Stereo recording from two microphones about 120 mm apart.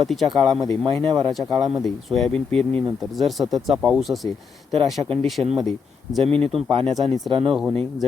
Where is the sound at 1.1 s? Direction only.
40° right (ahead or behind).